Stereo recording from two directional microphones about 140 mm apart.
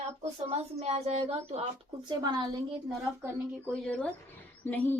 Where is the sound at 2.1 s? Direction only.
30° right (ahead or behind).